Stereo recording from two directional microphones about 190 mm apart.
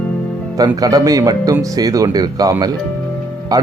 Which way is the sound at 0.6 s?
20° right (ahead or behind).